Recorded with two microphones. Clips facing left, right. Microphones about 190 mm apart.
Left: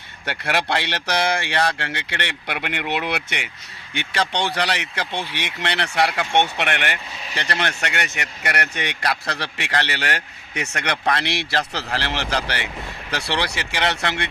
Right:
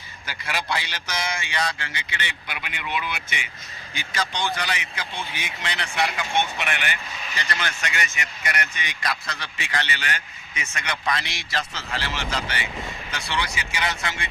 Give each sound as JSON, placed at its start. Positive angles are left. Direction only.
{"t": 0.3, "sound": "speech", "side_deg": 65}